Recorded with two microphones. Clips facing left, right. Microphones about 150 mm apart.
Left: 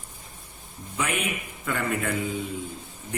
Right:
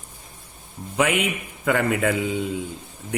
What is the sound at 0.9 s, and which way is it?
A man's voice, 85° right.